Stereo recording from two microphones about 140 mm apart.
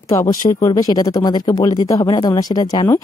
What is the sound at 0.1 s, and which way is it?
A woman's voice, 20° left (ahead or behind).